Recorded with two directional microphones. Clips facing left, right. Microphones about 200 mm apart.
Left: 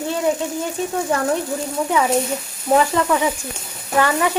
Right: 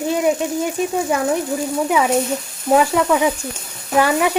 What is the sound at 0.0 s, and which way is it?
Speech, 15° right (ahead or behind).